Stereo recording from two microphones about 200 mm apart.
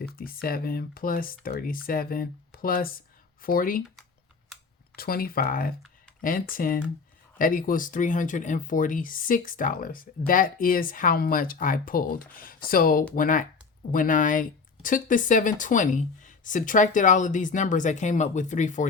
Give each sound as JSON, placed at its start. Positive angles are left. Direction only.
{"t": 0.4, "sound": "speech", "side_deg": 50}
{"t": 4.9, "sound": "speech", "side_deg": 50}